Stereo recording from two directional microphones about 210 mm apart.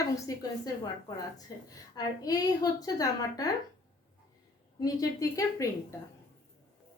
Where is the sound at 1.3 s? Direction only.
15° left (ahead or behind).